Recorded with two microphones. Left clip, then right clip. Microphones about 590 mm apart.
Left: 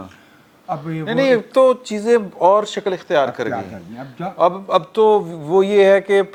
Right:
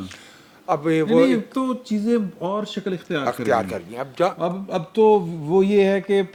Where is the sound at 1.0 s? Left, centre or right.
Left.